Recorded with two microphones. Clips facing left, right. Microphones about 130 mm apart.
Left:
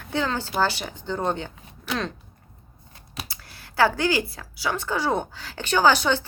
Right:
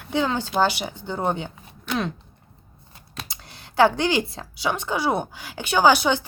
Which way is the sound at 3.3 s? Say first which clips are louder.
Right 3 dB; 20° right (ahead or behind).